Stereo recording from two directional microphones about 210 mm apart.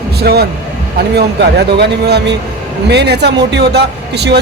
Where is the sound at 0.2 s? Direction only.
50° right (ahead or behind).